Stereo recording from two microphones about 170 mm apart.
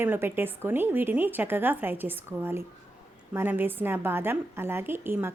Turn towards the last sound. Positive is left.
turn(degrees=-15)  # may be behind; listen again after turning